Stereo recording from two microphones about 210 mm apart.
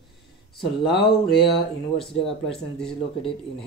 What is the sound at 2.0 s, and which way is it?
Speech, centre (ahead or behind).